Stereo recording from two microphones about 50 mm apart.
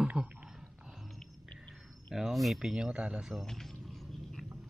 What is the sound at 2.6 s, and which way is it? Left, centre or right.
Speech, centre.